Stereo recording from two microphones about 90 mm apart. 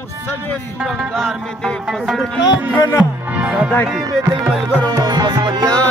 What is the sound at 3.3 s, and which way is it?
Music, 15° right (ahead or behind).